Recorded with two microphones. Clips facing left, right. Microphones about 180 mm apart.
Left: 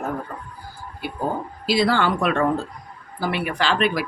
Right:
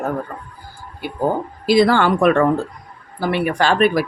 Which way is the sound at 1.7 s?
55° right (ahead or behind).